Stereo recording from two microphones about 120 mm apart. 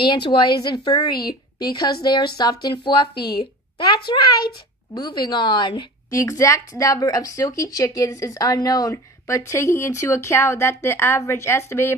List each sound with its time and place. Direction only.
0.0 s speech: 40° left (ahead or behind)
6.1 s speech: 30° left (ahead or behind)